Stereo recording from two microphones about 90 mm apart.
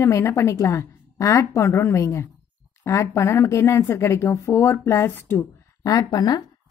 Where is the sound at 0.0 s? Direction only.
30° left (ahead or behind).